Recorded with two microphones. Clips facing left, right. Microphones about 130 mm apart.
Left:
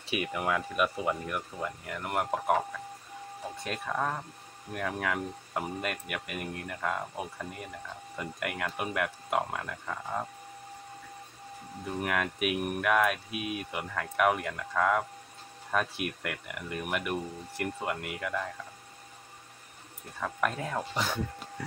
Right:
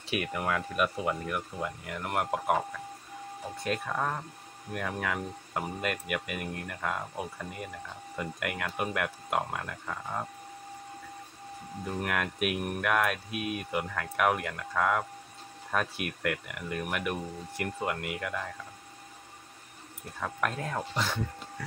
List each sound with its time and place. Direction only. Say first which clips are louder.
0.1 s speech: even; 5° left (ahead or behind)
3.6 s speech: right 1 dB; centre (ahead or behind)
8.2 s speech: even; centre (ahead or behind)
12.0 s speech: left 1 dB; centre (ahead or behind)
20.2 s speech: left 1 dB; centre (ahead or behind)
21.6 s speech: left 2 dB; 20° left (ahead or behind)